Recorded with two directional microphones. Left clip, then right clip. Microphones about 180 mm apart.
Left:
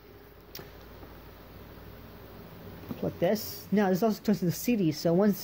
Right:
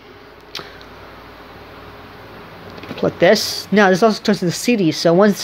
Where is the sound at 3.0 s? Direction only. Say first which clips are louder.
Right 16 dB; 10° right (ahead or behind).